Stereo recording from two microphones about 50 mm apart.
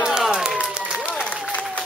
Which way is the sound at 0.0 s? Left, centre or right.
Centre.